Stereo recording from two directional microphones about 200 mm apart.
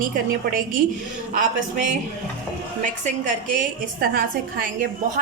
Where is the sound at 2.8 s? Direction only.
40° right (ahead or behind).